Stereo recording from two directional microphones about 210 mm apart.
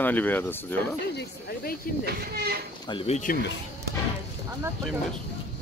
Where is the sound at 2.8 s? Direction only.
25° left (ahead or behind).